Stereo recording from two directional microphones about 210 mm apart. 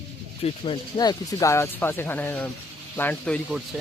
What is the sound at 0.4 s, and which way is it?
Speech, 25° left (ahead or behind).